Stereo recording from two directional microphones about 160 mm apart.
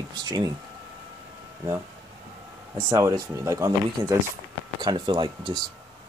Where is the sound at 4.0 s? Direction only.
30° right (ahead or behind).